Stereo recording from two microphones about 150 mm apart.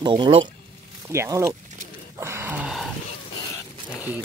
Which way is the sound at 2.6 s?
Centre (ahead or behind).